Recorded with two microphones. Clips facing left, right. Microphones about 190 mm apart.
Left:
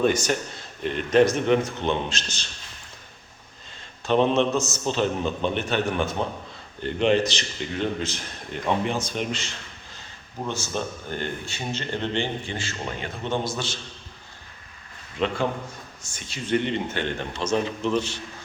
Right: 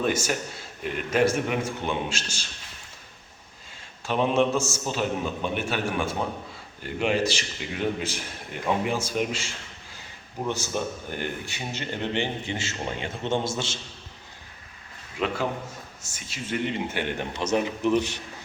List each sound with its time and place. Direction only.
0.0 s a man's voice: 5° right (ahead or behind)
4.0 s a man's voice: 10° right (ahead or behind)
10.8 s speech: 15° right (ahead or behind)
16.1 s a man's voice: 5° right (ahead or behind)